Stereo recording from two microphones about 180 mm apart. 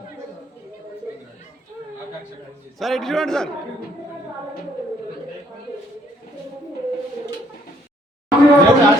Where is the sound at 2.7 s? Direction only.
Centre (ahead or behind).